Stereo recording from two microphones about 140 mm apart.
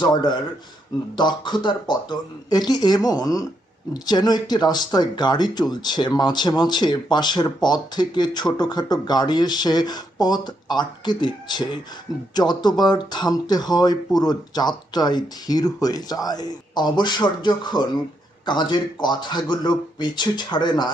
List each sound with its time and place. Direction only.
0.0 s speech: 30° left (ahead or behind)